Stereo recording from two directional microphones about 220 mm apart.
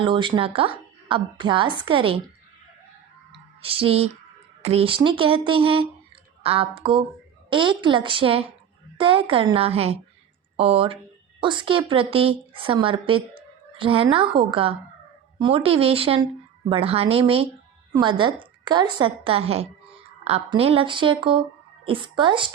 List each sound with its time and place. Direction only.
0.0 s a woman's voice: 20° right (ahead or behind)
3.3 s a woman's voice: 25° right (ahead or behind)